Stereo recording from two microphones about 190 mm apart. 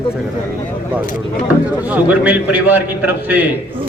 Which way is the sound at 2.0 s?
10° right (ahead or behind).